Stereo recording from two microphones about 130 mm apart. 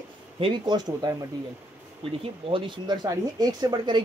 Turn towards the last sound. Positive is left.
turn(degrees=-35)  # may be behind; listen again after turning